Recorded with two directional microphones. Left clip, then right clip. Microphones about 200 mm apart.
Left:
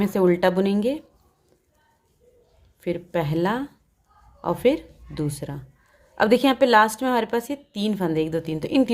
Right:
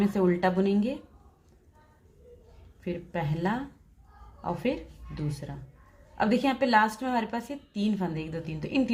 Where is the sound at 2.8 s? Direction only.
40° left (ahead or behind).